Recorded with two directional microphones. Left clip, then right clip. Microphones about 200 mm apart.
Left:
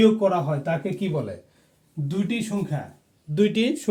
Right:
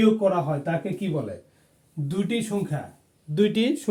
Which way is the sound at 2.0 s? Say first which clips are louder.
Right 1 dB; 15° right (ahead or behind).